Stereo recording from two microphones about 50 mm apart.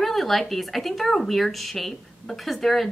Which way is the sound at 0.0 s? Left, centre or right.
Centre.